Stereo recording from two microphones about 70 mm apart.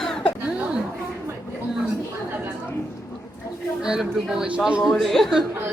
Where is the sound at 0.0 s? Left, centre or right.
Centre.